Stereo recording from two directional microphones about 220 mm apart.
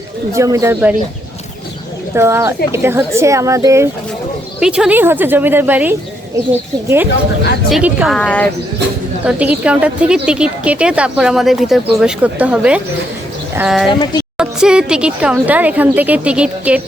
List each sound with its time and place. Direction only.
0.3 s a woman's voice: 15° right (ahead or behind)
2.1 s a woman's voice: 10° right (ahead or behind); by 8.4 s 5° left (ahead or behind)
9.2 s a woman's voice: 5° right (ahead or behind)
13.9 s a woman's voice: 20° left (ahead or behind)
14.3 s a woman's voice: 5° right (ahead or behind)